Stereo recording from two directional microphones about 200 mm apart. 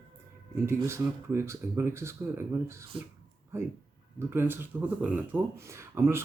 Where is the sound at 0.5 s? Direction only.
15° right (ahead or behind).